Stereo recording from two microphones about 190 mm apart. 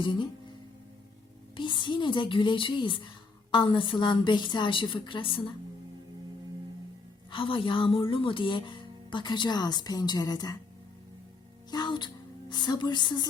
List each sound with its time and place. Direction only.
0.0 s speech: 25° left (ahead or behind)
1.5 s speech: 25° left (ahead or behind)
7.3 s speech: 25° left (ahead or behind)
11.7 s speech: 25° left (ahead or behind)